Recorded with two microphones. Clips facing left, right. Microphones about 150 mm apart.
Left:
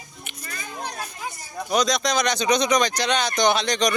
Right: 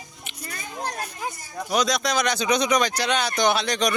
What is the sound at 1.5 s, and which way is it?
Speech, 5° right (ahead or behind).